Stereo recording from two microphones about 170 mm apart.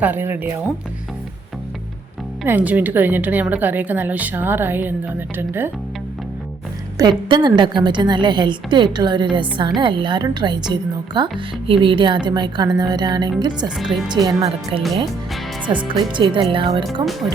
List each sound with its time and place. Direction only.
0.0 s a woman's voice: 10° right (ahead or behind)
2.4 s a woman's voice: 10° right (ahead or behind)
6.9 s a woman's voice: 25° right (ahead or behind)
13.7 s speech: centre (ahead or behind)
14.1 s a woman's voice: 25° right (ahead or behind)